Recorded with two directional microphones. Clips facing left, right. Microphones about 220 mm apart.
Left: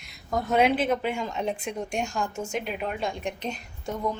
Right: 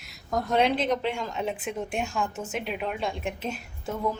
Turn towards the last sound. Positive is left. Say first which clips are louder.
# even
turn(degrees=-5)  # may be behind; listen again after turning